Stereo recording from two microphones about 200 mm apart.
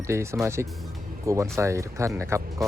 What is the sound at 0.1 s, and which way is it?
Speech, 15° right (ahead or behind).